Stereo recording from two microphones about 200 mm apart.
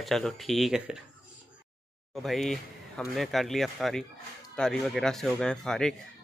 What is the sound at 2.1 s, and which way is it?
Speech, centre (ahead or behind).